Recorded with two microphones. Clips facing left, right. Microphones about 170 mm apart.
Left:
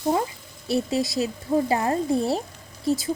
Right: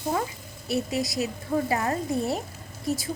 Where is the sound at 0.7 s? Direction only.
30° left (ahead or behind).